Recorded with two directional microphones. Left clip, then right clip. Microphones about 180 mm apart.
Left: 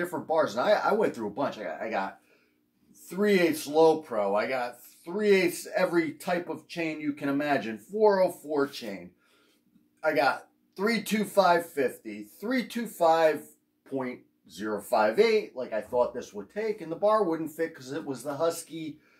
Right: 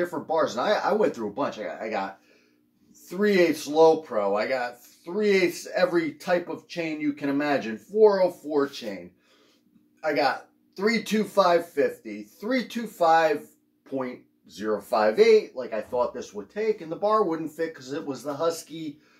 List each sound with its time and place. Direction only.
0.1 s speech: 20° left (ahead or behind)
3.1 s speech: 25° left (ahead or behind)
10.0 s speech: 20° left (ahead or behind)
14.5 s speech: 20° left (ahead or behind)